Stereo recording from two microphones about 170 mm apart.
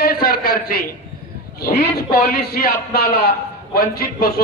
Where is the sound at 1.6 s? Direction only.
60° left (ahead or behind).